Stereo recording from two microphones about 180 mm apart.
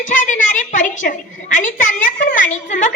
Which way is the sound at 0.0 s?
45° left (ahead or behind).